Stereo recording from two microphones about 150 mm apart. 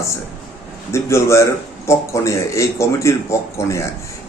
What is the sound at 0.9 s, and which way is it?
Speech, 20° left (ahead or behind).